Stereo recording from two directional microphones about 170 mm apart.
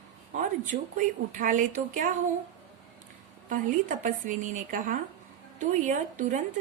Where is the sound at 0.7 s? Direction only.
60° right (ahead or behind).